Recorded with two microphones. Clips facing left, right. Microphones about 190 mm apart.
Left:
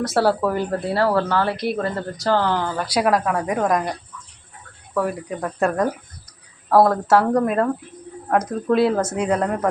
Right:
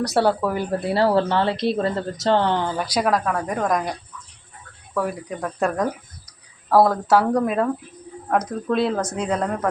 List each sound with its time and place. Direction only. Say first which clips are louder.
0.0 s speech: left 1 dB; centre (ahead or behind)
0.7 s speech: right 4 dB; 15° right (ahead or behind)
2.9 s a woman's voice: left 3 dB; 5° left (ahead or behind)
4.9 s speech: left 2 dB; centre (ahead or behind)